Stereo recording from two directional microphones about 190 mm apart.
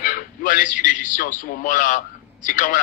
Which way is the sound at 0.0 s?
45° left (ahead or behind).